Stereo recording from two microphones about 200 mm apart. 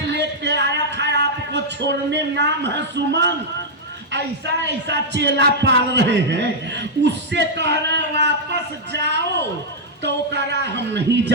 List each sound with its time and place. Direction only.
0.1 s a sound: 60° right (ahead or behind)
1.5 s a man's voice: 60° right (ahead or behind)
4.6 s a man's voice: 60° right (ahead or behind)